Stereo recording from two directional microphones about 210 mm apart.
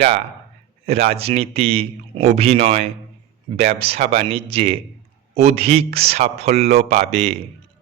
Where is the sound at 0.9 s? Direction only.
30° right (ahead or behind).